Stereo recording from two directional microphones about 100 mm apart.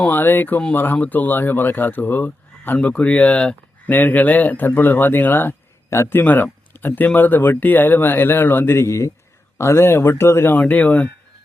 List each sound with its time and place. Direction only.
0.0 s speech: 20° left (ahead or behind)